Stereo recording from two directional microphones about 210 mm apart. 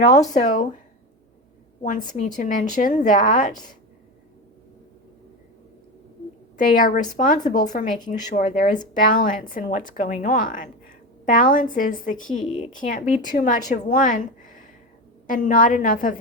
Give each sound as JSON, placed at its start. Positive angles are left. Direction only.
{"t": 0.4, "sound": "a woman's voice", "side_deg": 35}
{"t": 2.0, "sound": "a woman's voice", "side_deg": 35}
{"t": 6.6, "sound": "a woman's voice", "side_deg": 40}